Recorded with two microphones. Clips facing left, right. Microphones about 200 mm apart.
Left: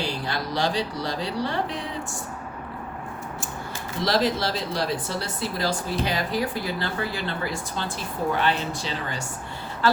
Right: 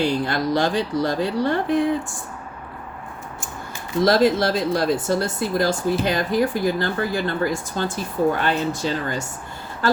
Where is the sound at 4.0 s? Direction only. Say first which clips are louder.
Right 7 dB; 50° right (ahead or behind).